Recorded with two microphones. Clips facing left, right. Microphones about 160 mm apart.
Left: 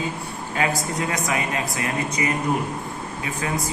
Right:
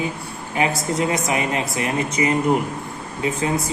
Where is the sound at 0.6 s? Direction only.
20° right (ahead or behind).